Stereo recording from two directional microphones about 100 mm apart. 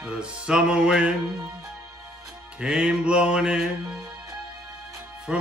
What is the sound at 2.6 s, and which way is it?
Music, 10° right (ahead or behind).